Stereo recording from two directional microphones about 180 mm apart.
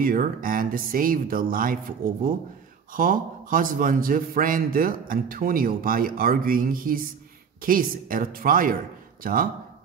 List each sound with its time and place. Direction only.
0.0 s a man's voice: 50° right (ahead or behind)